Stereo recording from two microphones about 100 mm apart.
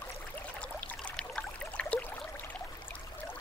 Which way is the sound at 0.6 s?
10° left (ahead or behind).